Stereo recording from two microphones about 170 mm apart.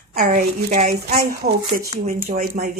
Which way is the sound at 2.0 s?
60° right (ahead or behind).